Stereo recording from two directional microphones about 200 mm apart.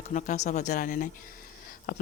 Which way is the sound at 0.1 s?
40° left (ahead or behind).